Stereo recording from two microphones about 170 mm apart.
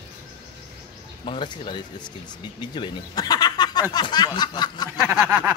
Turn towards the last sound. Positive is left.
turn(degrees=-15)  # may be behind; listen again after turning